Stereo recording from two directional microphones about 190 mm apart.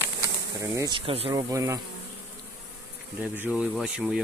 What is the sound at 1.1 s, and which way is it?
Speech, 30° right (ahead or behind).